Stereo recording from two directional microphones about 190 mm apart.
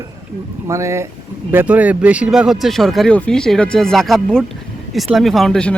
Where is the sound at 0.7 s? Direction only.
15° right (ahead or behind).